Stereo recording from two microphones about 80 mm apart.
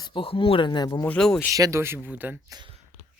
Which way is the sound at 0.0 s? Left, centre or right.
Left.